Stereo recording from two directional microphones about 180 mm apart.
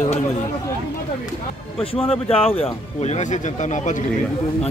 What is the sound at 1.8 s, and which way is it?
Speech, 30° left (ahead or behind).